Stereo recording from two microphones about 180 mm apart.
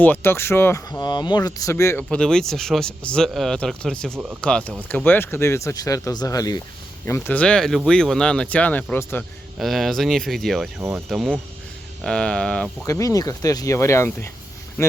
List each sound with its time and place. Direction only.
0.0 s speech: 10° left (ahead or behind)
9.6 s speech: centre (ahead or behind)
12.8 s speech: 20° left (ahead or behind)